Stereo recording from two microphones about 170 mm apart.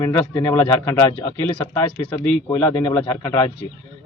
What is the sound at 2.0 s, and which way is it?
A man's voice, 35° left (ahead or behind).